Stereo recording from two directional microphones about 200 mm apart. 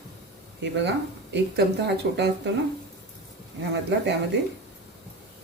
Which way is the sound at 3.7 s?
60° right (ahead or behind).